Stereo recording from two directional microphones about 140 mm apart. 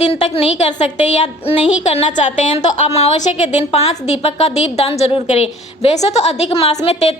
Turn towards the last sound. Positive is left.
turn(degrees=50)  # may be behind; listen again after turning